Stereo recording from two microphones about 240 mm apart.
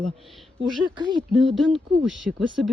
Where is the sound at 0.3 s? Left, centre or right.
Centre.